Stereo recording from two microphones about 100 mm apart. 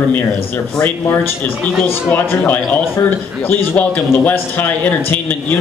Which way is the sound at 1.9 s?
20° left (ahead or behind).